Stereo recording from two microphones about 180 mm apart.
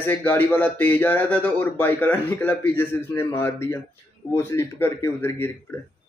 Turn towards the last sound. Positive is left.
turn(degrees=15)  # may be behind; listen again after turning